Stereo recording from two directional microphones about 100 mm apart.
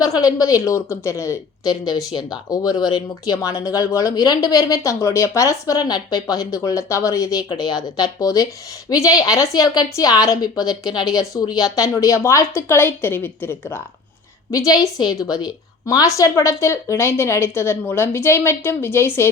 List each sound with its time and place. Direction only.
0.0 s speech: 35° left (ahead or behind)
4.5 s a woman's voice: 35° left (ahead or behind)
14.5 s a woman's voice: 35° left (ahead or behind)